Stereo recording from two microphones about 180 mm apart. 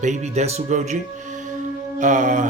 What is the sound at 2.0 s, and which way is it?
Speech, 45° right (ahead or behind).